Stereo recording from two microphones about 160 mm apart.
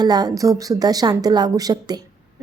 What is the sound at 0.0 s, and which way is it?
A woman's voice, 25° right (ahead or behind).